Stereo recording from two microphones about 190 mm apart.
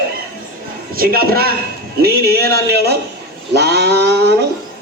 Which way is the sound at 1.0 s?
50° right (ahead or behind).